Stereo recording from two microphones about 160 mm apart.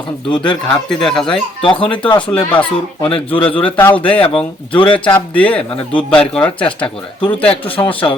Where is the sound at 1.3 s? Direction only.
35° left (ahead or behind).